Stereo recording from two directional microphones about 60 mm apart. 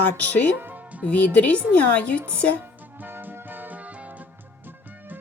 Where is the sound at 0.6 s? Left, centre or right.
Right.